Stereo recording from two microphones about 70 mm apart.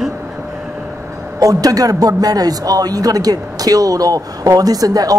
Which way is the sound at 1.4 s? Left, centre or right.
Right.